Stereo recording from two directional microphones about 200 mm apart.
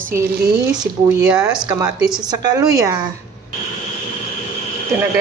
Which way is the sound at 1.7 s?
20° right (ahead or behind).